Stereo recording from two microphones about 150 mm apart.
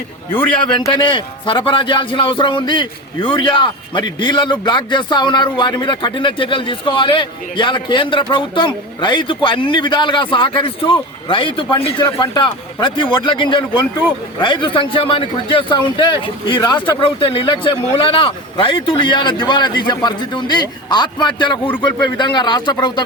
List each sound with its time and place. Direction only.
0.9 s a man's voice: 35° left (ahead or behind)